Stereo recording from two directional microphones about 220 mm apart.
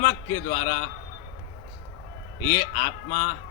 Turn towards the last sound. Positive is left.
turn(degrees=45)  # may be behind; listen again after turning